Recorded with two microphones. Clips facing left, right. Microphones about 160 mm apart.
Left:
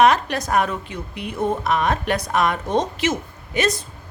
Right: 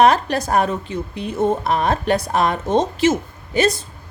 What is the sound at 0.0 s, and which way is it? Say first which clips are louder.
A woman's voice: right 2 dB; 35° right (ahead or behind).